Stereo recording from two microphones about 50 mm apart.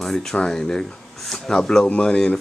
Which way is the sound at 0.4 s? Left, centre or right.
Centre.